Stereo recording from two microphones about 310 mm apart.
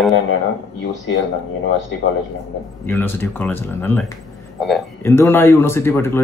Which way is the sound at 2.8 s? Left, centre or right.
Centre.